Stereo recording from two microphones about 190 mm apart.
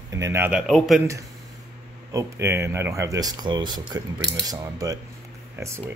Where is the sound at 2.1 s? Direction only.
15° right (ahead or behind).